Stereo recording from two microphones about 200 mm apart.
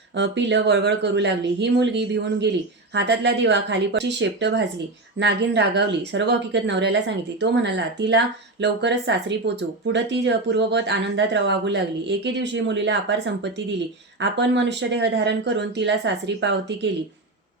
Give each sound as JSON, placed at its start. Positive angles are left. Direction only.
{"t": 0.2, "sound": "speech", "side_deg": -60}